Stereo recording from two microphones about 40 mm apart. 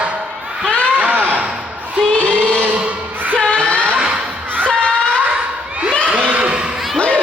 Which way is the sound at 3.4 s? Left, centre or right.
Left.